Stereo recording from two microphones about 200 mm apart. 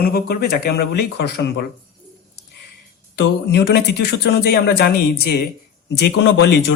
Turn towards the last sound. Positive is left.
turn(degrees=60)  # may be behind; listen again after turning